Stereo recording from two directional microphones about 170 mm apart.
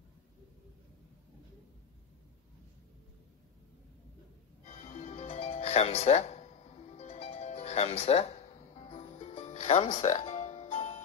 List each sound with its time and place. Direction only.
4.6 s music: 35° left (ahead or behind)